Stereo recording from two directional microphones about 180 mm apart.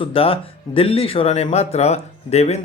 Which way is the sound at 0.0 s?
30° left (ahead or behind).